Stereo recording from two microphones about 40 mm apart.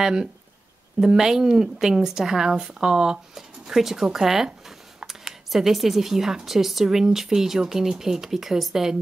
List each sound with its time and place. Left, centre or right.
0.0 s a woman's voice: centre